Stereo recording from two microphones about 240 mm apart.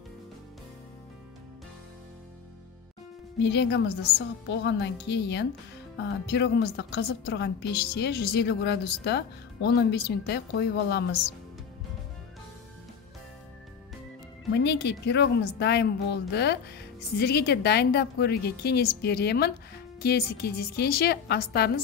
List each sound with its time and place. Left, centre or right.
3.3 s a woman's voice: left
14.5 s a woman's voice: left